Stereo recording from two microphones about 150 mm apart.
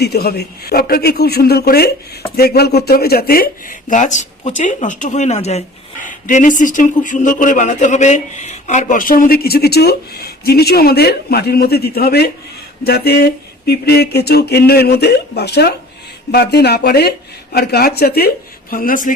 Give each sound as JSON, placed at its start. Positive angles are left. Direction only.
{"t": 0.0, "sound": "speech", "side_deg": 90}
{"t": 18.7, "sound": "speech", "side_deg": 70}